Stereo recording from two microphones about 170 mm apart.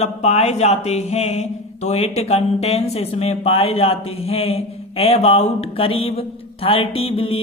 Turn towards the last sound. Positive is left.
turn(degrees=35)  # may be behind; listen again after turning